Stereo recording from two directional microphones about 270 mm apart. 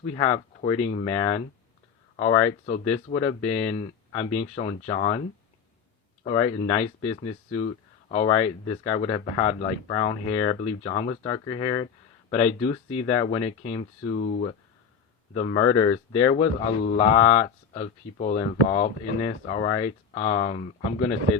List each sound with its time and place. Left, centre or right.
0.1 s speech: centre
6.2 s speech: centre